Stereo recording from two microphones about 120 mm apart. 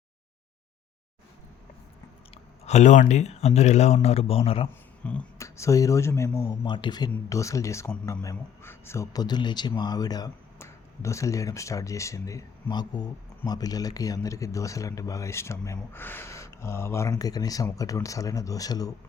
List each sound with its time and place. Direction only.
2.3 s speech: 70° left (ahead or behind); by 4.7 s 50° left (ahead or behind)
5.0 s speech: 10° left (ahead or behind)
5.4 s speech: 25° left (ahead or behind)
6.7 s speech: 40° left (ahead or behind); by 9.0 s 20° left (ahead or behind)
9.1 s a man's voice: 35° left (ahead or behind)